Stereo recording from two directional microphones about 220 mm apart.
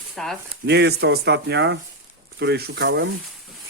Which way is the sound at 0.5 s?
50° right (ahead or behind).